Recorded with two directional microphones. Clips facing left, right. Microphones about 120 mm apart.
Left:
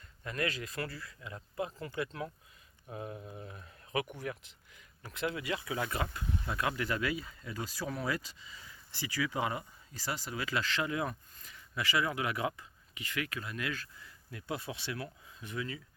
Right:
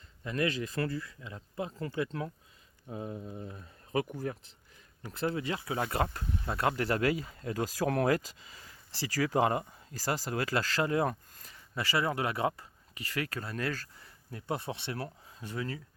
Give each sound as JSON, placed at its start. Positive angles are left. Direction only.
{"t": 0.3, "sound": "speech", "side_deg": -25}
{"t": 3.2, "sound": "speech", "side_deg": 10}
{"t": 3.4, "sound": "speech", "side_deg": -35}
{"t": 5.1, "sound": "speech", "side_deg": -30}